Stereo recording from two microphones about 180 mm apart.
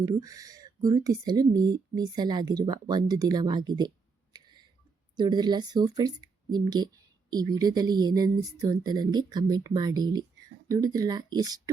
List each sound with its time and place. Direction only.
0.0 s speech: 20° right (ahead or behind)